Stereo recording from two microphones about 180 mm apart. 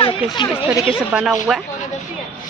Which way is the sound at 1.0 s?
5° right (ahead or behind).